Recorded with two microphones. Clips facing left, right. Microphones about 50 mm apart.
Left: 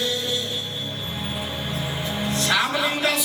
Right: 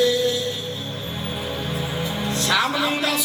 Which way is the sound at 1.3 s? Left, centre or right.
Centre.